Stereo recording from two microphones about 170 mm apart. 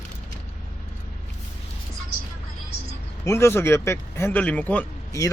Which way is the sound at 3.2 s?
15° left (ahead or behind).